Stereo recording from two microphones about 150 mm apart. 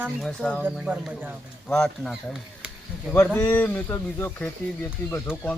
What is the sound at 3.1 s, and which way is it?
Speech, 15° left (ahead or behind).